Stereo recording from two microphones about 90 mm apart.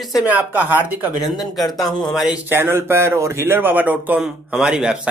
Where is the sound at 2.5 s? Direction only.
25° right (ahead or behind).